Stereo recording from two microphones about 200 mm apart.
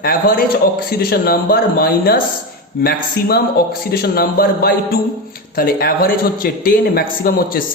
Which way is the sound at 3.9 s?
50° left (ahead or behind).